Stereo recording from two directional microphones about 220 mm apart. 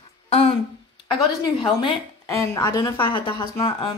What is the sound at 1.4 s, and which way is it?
A woman's voice, 20° left (ahead or behind).